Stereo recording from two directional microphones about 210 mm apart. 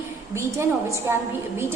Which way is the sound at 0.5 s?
10° right (ahead or behind).